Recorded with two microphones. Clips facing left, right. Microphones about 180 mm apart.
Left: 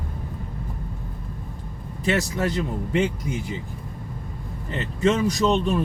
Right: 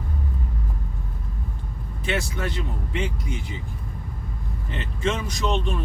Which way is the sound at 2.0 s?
40° left (ahead or behind).